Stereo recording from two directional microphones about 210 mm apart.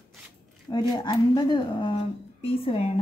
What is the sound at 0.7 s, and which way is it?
Speech, 20° left (ahead or behind).